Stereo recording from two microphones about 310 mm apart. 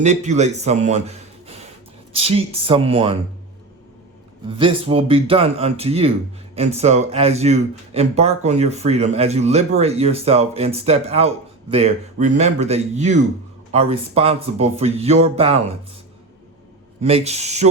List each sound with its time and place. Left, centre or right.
0.0 s a man's voice: right
4.4 s speech: centre
17.0 s speech: centre